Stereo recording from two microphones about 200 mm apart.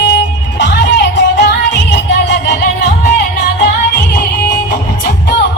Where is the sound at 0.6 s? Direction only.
60° left (ahead or behind).